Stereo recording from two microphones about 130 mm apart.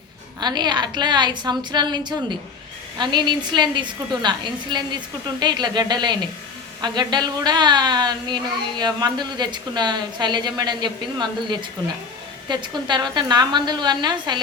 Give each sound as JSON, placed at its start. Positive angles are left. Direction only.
{"t": 0.3, "sound": "a woman's voice", "side_deg": -35}